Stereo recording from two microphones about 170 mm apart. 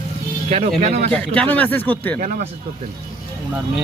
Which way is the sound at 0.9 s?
40° right (ahead or behind).